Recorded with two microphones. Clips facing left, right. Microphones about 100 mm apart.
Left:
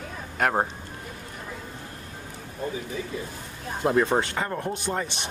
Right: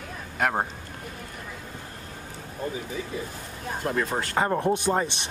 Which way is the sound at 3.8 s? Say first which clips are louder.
Left 6 dB; 25° left (ahead or behind).